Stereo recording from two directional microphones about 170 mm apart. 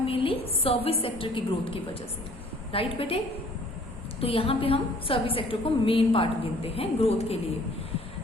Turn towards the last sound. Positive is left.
turn(degrees=35)  # may be behind; listen again after turning